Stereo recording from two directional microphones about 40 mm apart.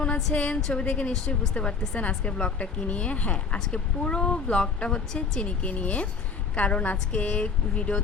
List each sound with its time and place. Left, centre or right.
0.3 s a woman's voice: left
5.5 s a woman's voice: left